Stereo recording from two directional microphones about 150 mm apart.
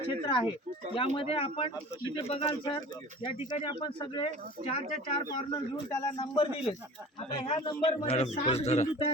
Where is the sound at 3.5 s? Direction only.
30° left (ahead or behind).